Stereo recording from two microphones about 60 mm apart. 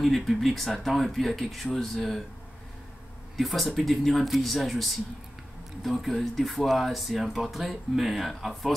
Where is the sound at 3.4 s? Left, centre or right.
Centre.